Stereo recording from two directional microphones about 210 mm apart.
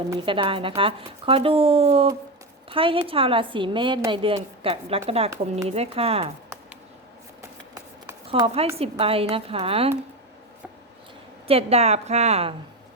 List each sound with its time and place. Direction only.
0.1 s a woman's voice: 25° right (ahead or behind)
8.3 s a woman's voice: 25° right (ahead or behind)
11.4 s a woman's voice: 30° right (ahead or behind)